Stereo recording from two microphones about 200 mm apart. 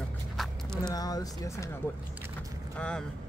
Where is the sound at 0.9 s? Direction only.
20° left (ahead or behind).